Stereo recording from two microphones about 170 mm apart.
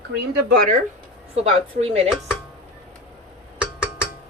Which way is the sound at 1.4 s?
35° right (ahead or behind).